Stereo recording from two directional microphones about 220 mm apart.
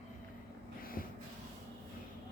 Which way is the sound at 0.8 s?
40° left (ahead or behind).